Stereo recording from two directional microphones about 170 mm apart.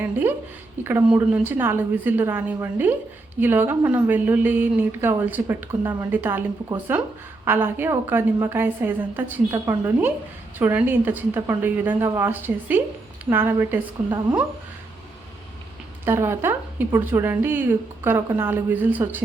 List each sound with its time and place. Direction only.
0.0 s a woman's voice: 10° right (ahead or behind)
16.0 s a woman's voice: 15° right (ahead or behind)